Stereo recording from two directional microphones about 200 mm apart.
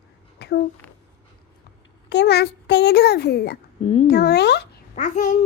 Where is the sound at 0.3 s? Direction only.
55° left (ahead or behind).